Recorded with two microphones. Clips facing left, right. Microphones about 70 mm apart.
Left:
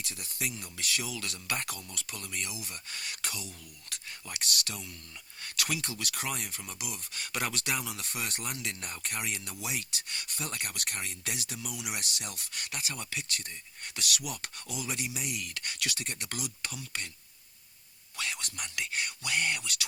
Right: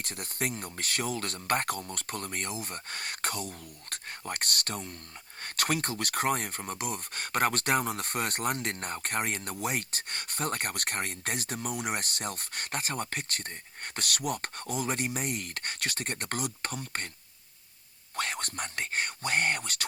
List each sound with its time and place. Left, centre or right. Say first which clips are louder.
0.0 s speech: right 4 dB; right
18.2 s speech: right 5 dB; right